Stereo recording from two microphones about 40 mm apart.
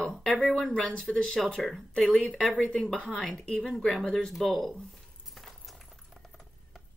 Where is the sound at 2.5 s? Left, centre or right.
Left.